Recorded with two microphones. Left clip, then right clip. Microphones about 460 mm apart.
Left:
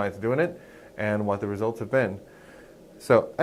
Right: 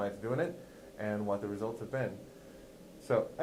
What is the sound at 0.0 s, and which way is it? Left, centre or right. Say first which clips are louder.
Speech: left 9 dB; left.